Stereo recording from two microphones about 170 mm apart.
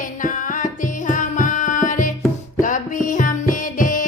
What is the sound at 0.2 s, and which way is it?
Music, 50° left (ahead or behind).